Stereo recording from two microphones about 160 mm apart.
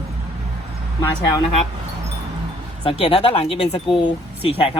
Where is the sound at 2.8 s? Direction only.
35° left (ahead or behind).